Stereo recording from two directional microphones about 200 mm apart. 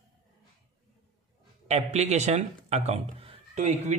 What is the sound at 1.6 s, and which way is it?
Speech, 35° right (ahead or behind).